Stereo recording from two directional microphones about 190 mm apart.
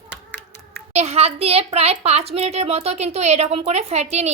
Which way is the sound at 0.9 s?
35° right (ahead or behind).